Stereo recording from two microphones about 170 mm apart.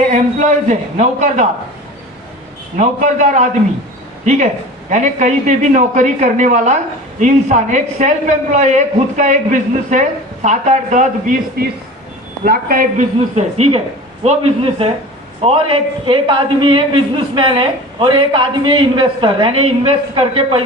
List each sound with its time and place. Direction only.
0.1 s a man's voice: 45° right (ahead or behind)
2.7 s a man's voice: 45° right (ahead or behind)
4.9 s a man's voice: 45° right (ahead or behind)